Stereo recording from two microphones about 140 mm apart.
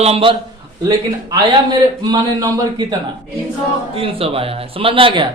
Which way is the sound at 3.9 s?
40° right (ahead or behind).